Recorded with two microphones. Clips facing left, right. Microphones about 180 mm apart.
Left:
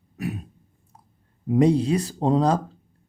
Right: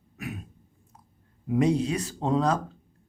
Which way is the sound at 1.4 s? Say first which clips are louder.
Left 5 dB; 35° left (ahead or behind).